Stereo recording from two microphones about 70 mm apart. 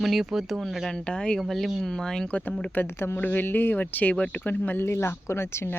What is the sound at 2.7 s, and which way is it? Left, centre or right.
Speech, left.